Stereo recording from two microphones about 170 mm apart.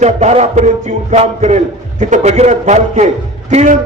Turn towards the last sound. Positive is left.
turn(degrees=-40)  # may be behind; listen again after turning